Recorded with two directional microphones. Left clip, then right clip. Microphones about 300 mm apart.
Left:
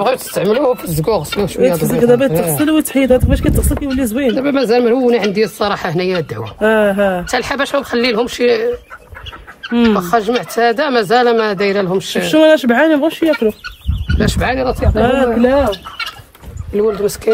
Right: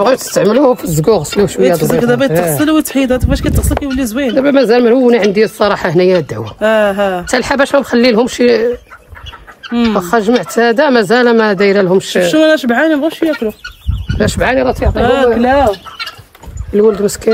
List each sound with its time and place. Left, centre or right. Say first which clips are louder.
0.0 s speech: right 5 dB; right
2.0 s speech: left 4 dB; centre
2.3 s speech: right 4 dB; right
2.6 s speech: right 2 dB; centre
4.4 s speech: right 6 dB; right
6.6 s speech: right 2 dB; centre
7.2 s speech: right 5 dB; right
9.7 s speech: left 1 dB; centre
9.9 s speech: right 3 dB; right
12.3 s speech: left 2 dB; centre
14.1 s speech: right 4 dB; right
15.0 s speech: right 2 dB; centre
16.7 s speech: right 4 dB; right